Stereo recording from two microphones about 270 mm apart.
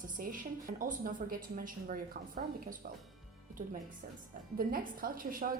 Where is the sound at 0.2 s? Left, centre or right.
Right.